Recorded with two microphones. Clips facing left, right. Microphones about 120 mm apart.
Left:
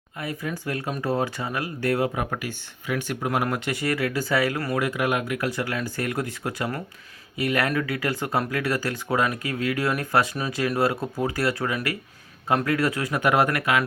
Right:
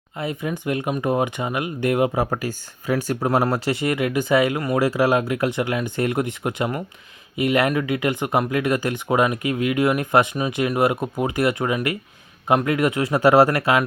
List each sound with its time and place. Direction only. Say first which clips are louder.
0.2 s speech: right 4 dB; 20° right (ahead or behind)
2.3 s speech: right 5 dB; 40° right (ahead or behind); by 4.8 s 20° right (ahead or behind)
4.8 s speech: right 8 dB; 30° right (ahead or behind)